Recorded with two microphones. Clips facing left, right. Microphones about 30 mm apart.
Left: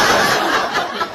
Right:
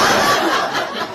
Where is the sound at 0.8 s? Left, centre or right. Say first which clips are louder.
Left 2 dB; left.